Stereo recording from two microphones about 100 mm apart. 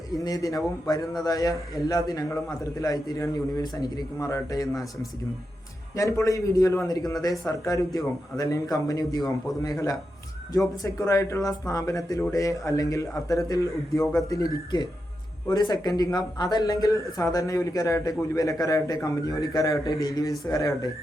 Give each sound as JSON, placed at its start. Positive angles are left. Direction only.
{"t": 0.3, "sound": "a man's voice", "side_deg": 35}
{"t": 6.2, "sound": "a man's voice", "side_deg": 30}
{"t": 10.8, "sound": "a man's voice", "side_deg": 30}